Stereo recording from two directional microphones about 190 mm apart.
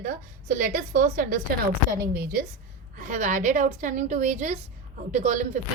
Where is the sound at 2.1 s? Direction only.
55° right (ahead or behind).